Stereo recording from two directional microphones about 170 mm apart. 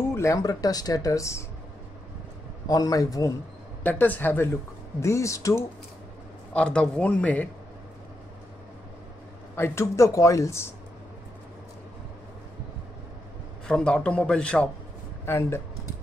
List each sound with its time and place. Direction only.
0.1 s speech: 20° left (ahead or behind)
2.7 s speech: 20° left (ahead or behind)
6.5 s speech: 5° left (ahead or behind)
9.6 s speech: 15° left (ahead or behind)
13.7 s a man's voice: 5° left (ahead or behind)